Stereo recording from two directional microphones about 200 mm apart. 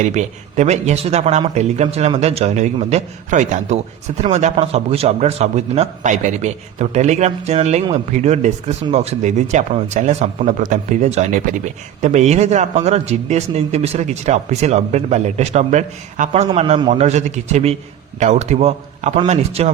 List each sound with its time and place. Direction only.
0.0 s speech: 35° right (ahead or behind)